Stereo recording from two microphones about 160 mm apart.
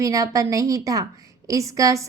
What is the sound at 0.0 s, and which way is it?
A woman's voice, 20° right (ahead or behind).